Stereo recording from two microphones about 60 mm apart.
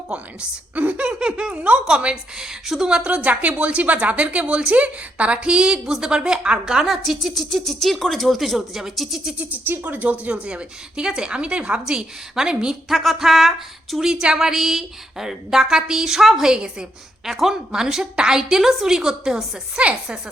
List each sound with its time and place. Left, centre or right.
0.8 s a woman's voice: right
3.2 s a woman's voice: right
6.8 s speech: centre
9.4 s a woman's voice: right; by 19.8 s centre